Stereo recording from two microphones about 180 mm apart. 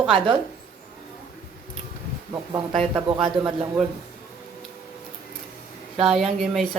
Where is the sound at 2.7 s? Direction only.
Centre (ahead or behind).